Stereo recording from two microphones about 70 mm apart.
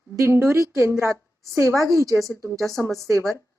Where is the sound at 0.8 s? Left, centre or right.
Right.